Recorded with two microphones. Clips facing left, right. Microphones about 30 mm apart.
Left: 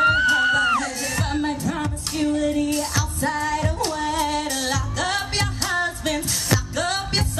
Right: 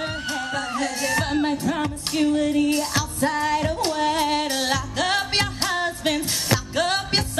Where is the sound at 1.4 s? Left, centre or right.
Centre.